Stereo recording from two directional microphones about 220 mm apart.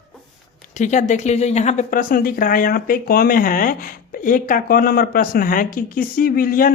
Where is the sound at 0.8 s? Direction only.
35° left (ahead or behind).